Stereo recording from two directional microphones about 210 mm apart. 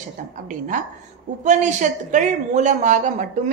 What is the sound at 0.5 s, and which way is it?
A woman's voice, 40° right (ahead or behind).